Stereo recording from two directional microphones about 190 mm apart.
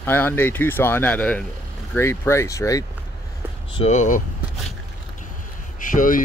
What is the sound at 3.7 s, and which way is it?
Speech, 30° left (ahead or behind).